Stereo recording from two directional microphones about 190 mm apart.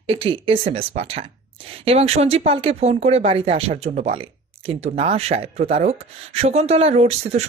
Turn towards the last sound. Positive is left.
turn(degrees=-35)  # may be behind; listen again after turning